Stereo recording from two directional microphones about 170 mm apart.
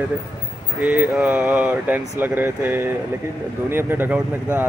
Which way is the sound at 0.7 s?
10° right (ahead or behind).